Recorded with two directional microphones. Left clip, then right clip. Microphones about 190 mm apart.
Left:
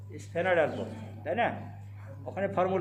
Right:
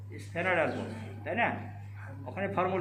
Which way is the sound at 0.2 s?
60° left (ahead or behind).